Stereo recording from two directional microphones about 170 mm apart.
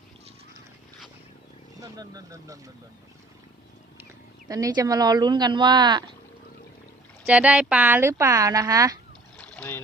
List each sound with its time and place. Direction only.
1.8 s speech: 20° right (ahead or behind)
4.4 s speech: 20° right (ahead or behind)
7.3 s speech: 10° right (ahead or behind)
9.4 s rowboat: 5° left (ahead or behind)